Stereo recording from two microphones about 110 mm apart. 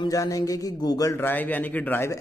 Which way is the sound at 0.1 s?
30° left (ahead or behind).